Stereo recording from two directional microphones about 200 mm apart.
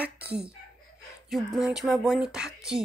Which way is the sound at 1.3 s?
Centre (ahead or behind).